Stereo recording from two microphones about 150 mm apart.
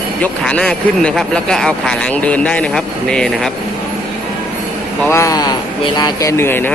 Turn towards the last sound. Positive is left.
turn(degrees=15)  # may be behind; listen again after turning